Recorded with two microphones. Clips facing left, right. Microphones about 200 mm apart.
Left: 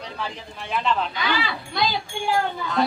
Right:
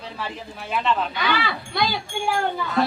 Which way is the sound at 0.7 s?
Centre (ahead or behind).